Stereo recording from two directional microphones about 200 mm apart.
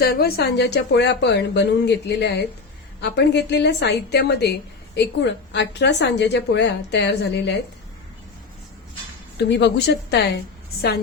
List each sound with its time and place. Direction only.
0.0 s a woman's voice: 50° left (ahead or behind)
9.5 s a woman's voice: 60° left (ahead or behind)